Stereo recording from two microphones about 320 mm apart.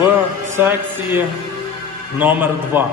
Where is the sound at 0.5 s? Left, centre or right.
Centre.